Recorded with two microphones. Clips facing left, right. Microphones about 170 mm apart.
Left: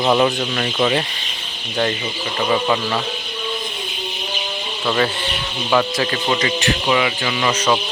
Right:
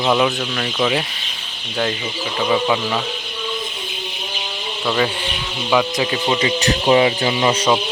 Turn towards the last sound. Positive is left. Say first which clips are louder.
# right 3 dB
turn(degrees=-25)  # may be behind; listen again after turning